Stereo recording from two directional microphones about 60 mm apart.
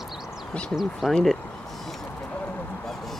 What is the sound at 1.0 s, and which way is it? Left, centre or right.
Speech, centre.